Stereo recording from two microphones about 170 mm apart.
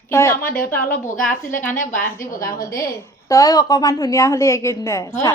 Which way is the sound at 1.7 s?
50° left (ahead or behind).